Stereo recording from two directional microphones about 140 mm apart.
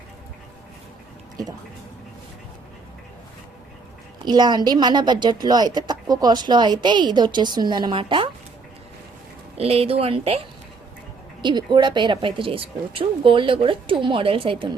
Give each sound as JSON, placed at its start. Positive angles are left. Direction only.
{"t": 4.3, "sound": "a woman's voice", "side_deg": -30}
{"t": 9.6, "sound": "a woman's voice", "side_deg": -45}
{"t": 11.4, "sound": "a woman's voice", "side_deg": -35}